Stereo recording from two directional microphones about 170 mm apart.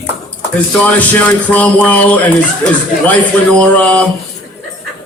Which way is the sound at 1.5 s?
10° left (ahead or behind).